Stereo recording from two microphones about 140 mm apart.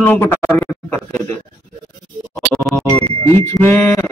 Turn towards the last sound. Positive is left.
turn(degrees=20)  # may be behind; listen again after turning